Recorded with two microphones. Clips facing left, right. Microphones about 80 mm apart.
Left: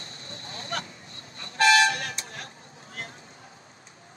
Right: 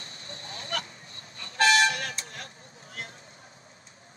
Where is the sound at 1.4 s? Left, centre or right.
Left.